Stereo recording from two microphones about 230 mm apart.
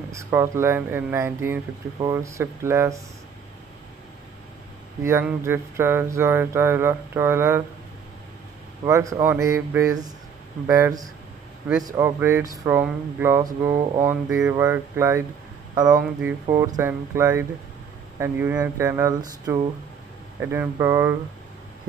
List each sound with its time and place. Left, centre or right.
0.1 s speech: centre
5.0 s speech: centre
8.8 s speech: centre